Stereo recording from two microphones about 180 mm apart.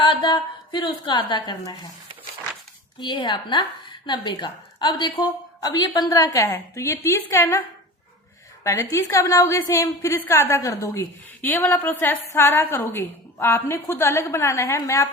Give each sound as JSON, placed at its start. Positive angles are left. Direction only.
{"t": 0.0, "sound": "a woman's voice", "side_deg": 25}
{"t": 3.0, "sound": "a woman's voice", "side_deg": 25}
{"t": 8.6, "sound": "a woman's voice", "side_deg": 15}